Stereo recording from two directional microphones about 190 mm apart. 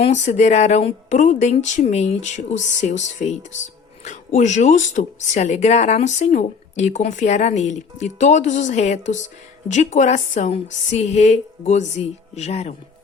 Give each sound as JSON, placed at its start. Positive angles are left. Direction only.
{"t": 0.0, "sound": "speech", "side_deg": 35}